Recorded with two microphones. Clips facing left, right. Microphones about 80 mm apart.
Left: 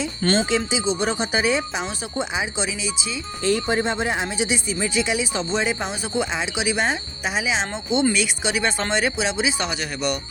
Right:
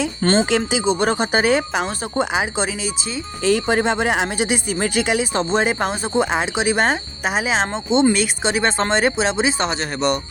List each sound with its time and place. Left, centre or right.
0.2 s speech: right
0.9 s speech: right
3.4 s speech: right
7.7 s speech: right